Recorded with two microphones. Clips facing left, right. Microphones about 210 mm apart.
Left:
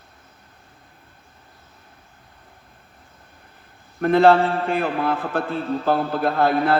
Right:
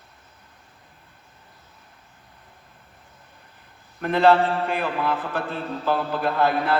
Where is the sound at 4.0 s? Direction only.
45° left (ahead or behind).